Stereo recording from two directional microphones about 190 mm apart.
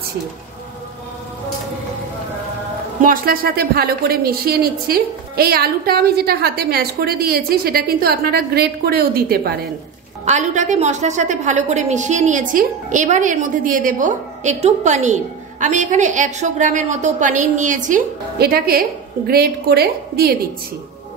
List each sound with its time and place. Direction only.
3.0 s a woman's voice: 50° right (ahead or behind)
10.2 s a woman's voice: 40° right (ahead or behind); by 20.3 s 55° right (ahead or behind)